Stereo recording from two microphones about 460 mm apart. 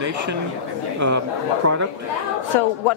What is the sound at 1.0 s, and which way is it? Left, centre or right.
Speech, right.